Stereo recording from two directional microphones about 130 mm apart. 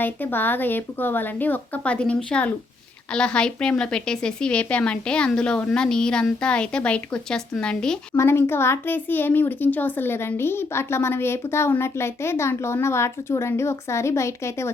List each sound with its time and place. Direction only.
0.0 s a woman's voice: 15° left (ahead or behind)
8.1 s a child's voice: 20° left (ahead or behind)